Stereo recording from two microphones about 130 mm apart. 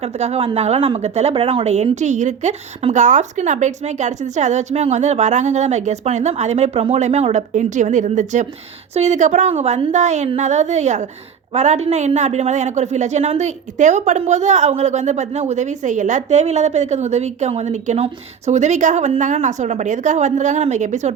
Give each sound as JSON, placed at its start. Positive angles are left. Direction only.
{"t": 0.0, "sound": "a woman's voice", "side_deg": -55}